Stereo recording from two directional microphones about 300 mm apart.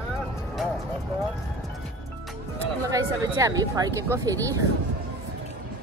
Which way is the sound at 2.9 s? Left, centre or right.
Centre.